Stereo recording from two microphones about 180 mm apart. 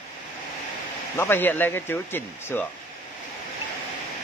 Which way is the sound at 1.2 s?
10° left (ahead or behind).